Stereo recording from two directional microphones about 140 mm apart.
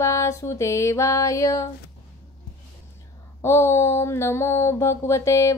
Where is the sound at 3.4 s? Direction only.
20° left (ahead or behind).